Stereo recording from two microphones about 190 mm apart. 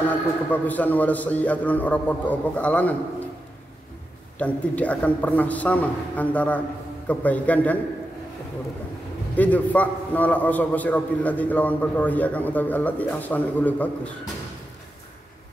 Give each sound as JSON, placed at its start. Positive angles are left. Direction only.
{"t": 0.1, "sound": "a man's voice", "side_deg": 10}
{"t": 4.4, "sound": "a man's voice", "side_deg": 5}
{"t": 9.3, "sound": "a man's voice", "side_deg": 10}